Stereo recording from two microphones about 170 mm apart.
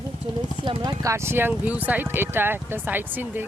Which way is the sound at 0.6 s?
20° right (ahead or behind).